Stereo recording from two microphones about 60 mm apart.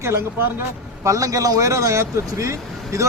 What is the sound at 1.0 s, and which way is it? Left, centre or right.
A man's voice, right.